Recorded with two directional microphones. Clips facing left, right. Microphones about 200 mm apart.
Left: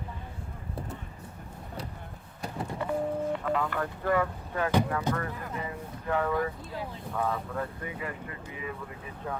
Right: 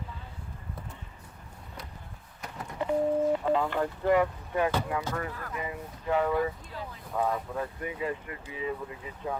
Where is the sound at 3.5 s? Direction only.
25° right (ahead or behind).